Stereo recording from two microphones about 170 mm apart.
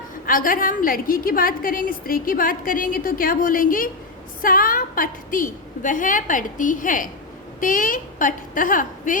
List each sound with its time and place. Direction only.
0.3 s a woman's voice: 55° left (ahead or behind)